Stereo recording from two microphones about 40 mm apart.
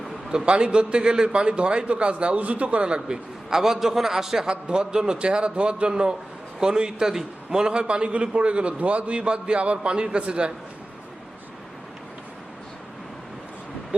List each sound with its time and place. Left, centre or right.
0.3 s a man's voice: right
2.8 s a man's voice: right
4.4 s a man's voice: right